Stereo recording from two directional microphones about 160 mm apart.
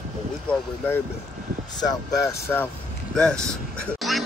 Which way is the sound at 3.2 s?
5° left (ahead or behind).